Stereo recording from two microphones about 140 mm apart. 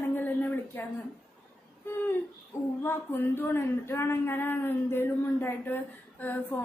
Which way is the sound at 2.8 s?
15° left (ahead or behind).